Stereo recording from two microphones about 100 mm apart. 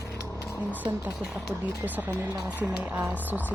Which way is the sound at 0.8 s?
15° right (ahead or behind).